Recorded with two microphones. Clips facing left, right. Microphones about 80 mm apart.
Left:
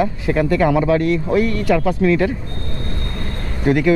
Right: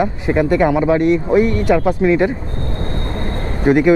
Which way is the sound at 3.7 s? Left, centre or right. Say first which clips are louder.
Right 3 dB; right.